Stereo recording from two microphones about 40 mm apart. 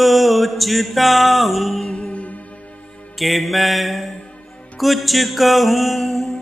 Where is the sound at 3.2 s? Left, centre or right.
Centre.